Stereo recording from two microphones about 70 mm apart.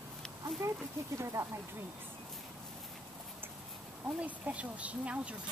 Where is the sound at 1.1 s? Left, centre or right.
Right.